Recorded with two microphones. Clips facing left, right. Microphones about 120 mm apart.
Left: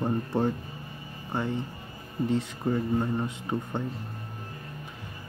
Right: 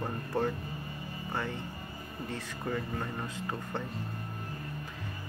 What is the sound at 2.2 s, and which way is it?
Speech, 20° left (ahead or behind).